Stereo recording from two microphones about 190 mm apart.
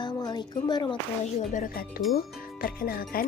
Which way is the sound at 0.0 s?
20° left (ahead or behind).